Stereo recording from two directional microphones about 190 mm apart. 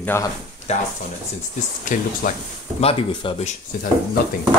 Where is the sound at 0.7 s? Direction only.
35° left (ahead or behind).